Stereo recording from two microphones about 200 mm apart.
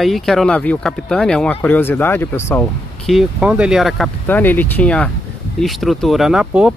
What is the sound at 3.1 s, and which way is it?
Speech, 5° right (ahead or behind).